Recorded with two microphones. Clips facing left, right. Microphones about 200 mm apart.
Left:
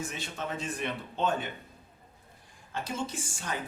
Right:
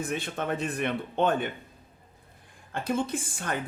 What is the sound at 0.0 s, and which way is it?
Speech, 55° right (ahead or behind).